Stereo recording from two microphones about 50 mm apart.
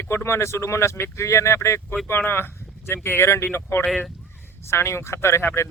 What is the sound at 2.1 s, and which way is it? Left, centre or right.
Speech, left.